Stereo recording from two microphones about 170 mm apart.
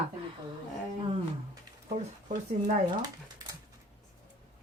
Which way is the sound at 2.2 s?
45° right (ahead or behind).